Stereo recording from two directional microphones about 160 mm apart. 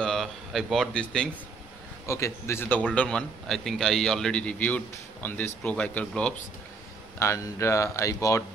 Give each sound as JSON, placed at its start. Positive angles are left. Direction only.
{"t": 0.0, "sound": "speech", "side_deg": 0}
{"t": 2.0, "sound": "a man's voice", "side_deg": 15}
{"t": 7.2, "sound": "a man's voice", "side_deg": 20}